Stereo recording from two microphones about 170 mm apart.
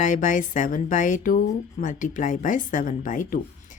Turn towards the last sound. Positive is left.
turn(degrees=50)  # may be behind; listen again after turning